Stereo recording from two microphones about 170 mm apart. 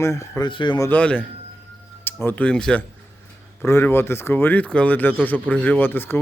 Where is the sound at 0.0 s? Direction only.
15° left (ahead or behind).